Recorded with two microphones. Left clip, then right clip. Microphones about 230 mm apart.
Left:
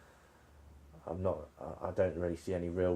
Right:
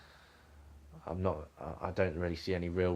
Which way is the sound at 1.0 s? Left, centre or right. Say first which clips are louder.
Even; right.